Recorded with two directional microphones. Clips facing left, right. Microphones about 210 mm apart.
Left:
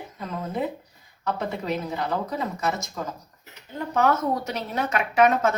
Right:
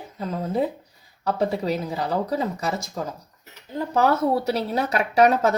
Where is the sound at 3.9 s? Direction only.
35° right (ahead or behind).